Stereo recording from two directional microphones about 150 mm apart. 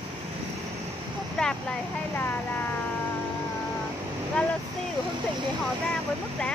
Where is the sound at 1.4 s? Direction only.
5° left (ahead or behind).